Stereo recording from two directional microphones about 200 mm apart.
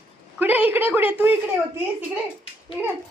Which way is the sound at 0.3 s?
10° right (ahead or behind).